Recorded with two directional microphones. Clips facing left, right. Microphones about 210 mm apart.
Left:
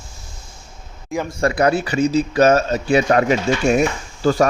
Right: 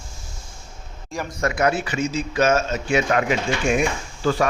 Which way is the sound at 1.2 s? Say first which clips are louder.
Left 4 dB; 35° left (ahead or behind).